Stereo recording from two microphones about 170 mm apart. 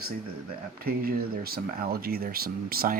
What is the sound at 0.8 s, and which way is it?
Speech, 60° right (ahead or behind).